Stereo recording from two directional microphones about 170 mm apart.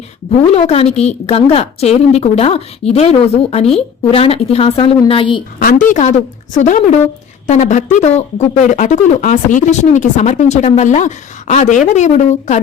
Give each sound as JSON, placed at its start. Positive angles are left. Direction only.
{"t": 0.5, "sound": "a woman's voice", "side_deg": 40}
{"t": 5.5, "sound": "speech", "side_deg": 55}